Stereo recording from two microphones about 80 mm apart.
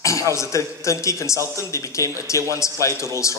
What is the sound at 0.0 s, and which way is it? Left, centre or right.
A man's voice, left.